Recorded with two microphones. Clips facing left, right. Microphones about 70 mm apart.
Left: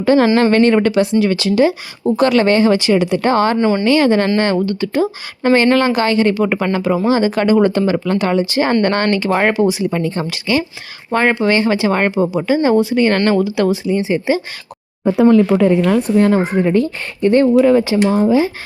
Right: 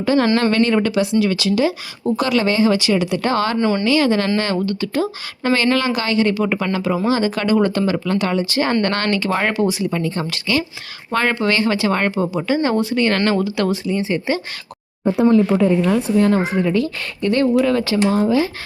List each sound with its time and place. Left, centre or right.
0.0 s speech: left
2.7 s speech: left
3.6 s speech: centre
3.8 s speech: left
5.6 s speech: left; by 14.4 s centre
15.2 s speech: left